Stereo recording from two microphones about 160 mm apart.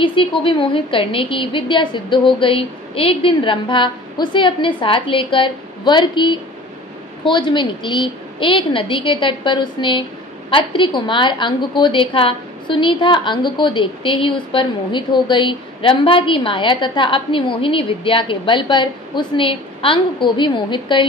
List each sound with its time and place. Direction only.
0.0 s a woman's voice: 30° left (ahead or behind)